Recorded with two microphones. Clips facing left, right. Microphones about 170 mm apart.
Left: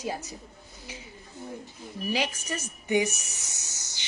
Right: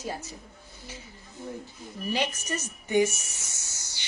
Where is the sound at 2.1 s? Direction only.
10° left (ahead or behind).